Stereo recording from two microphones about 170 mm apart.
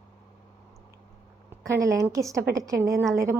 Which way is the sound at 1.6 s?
15° right (ahead or behind).